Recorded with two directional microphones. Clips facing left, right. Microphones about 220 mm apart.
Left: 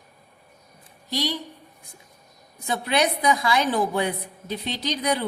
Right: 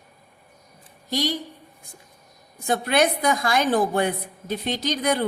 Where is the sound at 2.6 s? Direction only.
50° right (ahead or behind).